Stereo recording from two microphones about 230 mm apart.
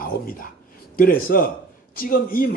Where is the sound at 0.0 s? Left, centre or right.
Left.